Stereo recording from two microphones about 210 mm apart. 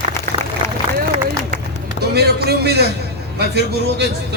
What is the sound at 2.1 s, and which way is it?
A man's voice, 50° right (ahead or behind).